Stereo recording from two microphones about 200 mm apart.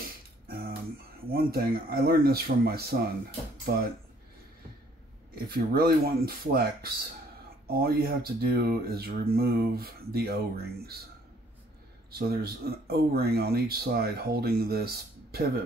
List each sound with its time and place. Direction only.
0.0 s beatboxing: 45° right (ahead or behind)
1.3 s speech: 50° right (ahead or behind)
5.3 s speech: 50° right (ahead or behind)
12.2 s speech: 50° right (ahead or behind)